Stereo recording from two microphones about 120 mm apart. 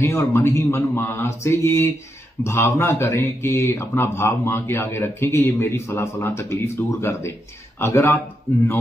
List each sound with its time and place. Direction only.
0.0 s a man's voice: 20° left (ahead or behind)